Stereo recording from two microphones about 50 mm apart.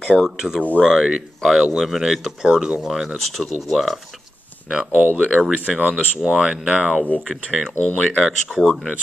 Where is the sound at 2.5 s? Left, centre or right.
Right.